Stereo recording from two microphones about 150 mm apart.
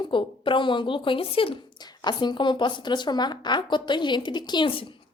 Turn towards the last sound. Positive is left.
turn(degrees=35)  # may be behind; listen again after turning